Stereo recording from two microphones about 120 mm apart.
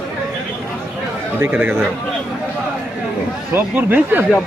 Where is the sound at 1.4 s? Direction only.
15° right (ahead or behind).